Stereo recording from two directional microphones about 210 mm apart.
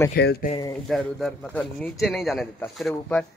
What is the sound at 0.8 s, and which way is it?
A man's voice, centre (ahead or behind).